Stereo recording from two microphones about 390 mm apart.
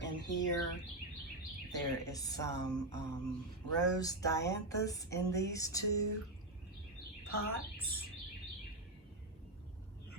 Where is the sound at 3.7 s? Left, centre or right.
Centre.